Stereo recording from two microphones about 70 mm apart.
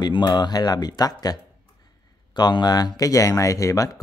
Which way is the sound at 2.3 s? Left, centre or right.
Left.